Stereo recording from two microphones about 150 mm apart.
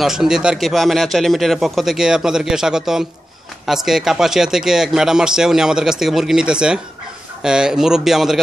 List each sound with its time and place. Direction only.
0.0 s speech: 5° right (ahead or behind)